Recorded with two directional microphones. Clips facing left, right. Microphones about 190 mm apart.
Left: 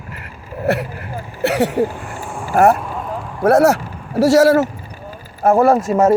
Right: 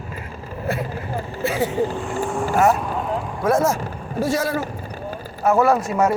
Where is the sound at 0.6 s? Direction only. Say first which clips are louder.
Left 6 dB; 75° left (ahead or behind).